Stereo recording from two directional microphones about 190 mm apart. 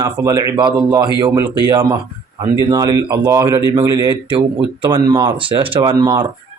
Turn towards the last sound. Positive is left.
turn(degrees=-20)  # may be behind; listen again after turning